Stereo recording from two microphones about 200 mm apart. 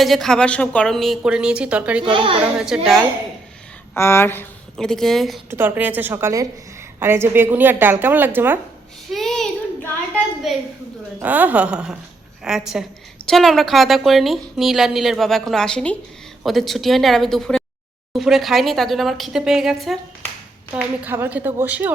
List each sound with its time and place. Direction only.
0.0 s a woman's voice: centre (ahead or behind)
2.0 s a child's voice: 25° right (ahead or behind)
2.6 s a woman's voice: centre (ahead or behind)
3.9 s a woman's voice: 10° left (ahead or behind)
5.5 s a woman's voice: 10° right (ahead or behind)
9.0 s child singing: centre (ahead or behind)
10.5 s a woman's voice: centre (ahead or behind)